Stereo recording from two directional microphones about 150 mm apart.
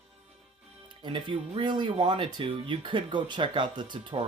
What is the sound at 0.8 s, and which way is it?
Speech, 30° right (ahead or behind).